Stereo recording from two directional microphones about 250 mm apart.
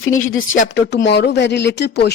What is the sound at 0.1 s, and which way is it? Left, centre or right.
Speech, left.